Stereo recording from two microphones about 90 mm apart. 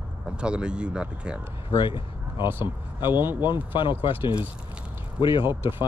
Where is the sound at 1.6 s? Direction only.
65° left (ahead or behind).